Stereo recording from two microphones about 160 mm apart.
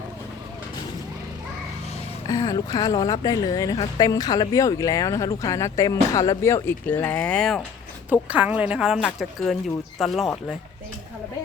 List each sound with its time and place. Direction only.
2.2 s speech: 25° left (ahead or behind); by 7.6 s 5° left (ahead or behind)
8.1 s speech: 10° right (ahead or behind)